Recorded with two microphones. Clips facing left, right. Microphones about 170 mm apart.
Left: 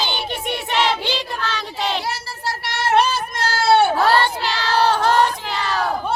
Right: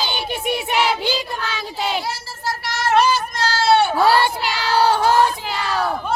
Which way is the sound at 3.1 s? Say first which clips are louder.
Right 1 dB; 30° left (ahead or behind).